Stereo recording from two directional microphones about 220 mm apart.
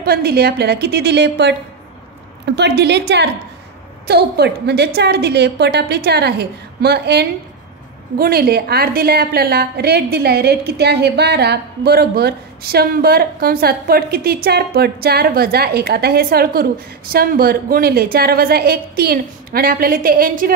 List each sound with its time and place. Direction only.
0.0 s a woman's voice: 45° right (ahead or behind)